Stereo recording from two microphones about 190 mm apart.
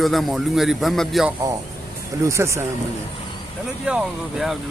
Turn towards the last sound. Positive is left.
turn(degrees=0)  # may be behind; listen again after turning